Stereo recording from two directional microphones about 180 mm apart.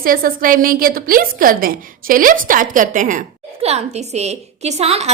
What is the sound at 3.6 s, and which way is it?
A woman's voice, 35° right (ahead or behind).